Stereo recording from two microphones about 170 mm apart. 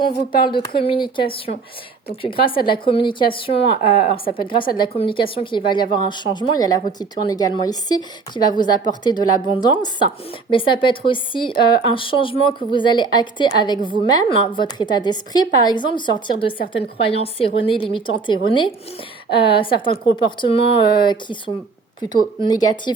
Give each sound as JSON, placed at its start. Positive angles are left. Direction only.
{"t": 0.4, "sound": "a woman's voice", "side_deg": 25}
{"t": 2.4, "sound": "a woman's voice", "side_deg": 30}